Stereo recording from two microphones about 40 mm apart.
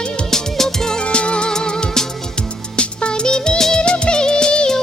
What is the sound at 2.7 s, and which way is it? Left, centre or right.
Music, left.